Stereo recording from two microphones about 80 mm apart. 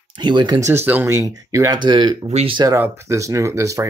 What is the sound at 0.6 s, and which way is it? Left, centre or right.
Speech, right.